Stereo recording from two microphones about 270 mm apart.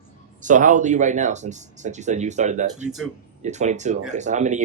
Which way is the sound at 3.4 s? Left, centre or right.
Right.